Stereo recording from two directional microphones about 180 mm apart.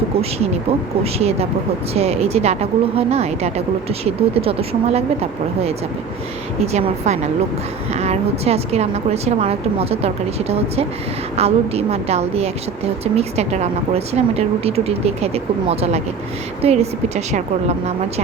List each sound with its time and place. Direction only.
1.0 s a woman's voice: 35° right (ahead or behind)